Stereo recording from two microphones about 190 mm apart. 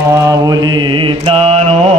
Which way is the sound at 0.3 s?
20° right (ahead or behind).